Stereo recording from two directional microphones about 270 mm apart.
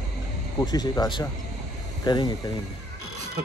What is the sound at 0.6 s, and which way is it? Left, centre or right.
Speech, centre.